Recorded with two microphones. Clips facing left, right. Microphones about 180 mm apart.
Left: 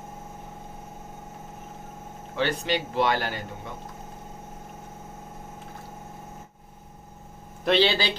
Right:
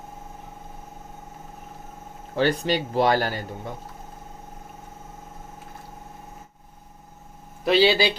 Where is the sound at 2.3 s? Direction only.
40° right (ahead or behind).